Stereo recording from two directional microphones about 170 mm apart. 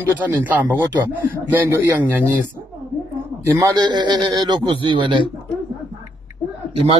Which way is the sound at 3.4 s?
20° right (ahead or behind).